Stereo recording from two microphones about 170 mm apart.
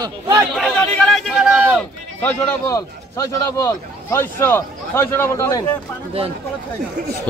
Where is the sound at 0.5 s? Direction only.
5° left (ahead or behind).